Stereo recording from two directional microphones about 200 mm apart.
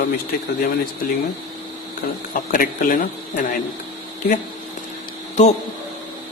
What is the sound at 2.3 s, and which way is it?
Speech, 45° left (ahead or behind).